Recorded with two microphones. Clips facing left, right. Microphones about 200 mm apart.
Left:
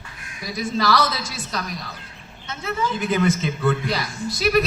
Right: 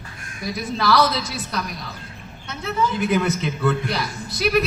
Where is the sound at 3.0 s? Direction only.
60° right (ahead or behind).